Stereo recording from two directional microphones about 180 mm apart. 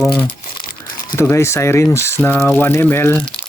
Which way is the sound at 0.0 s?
5° left (ahead or behind).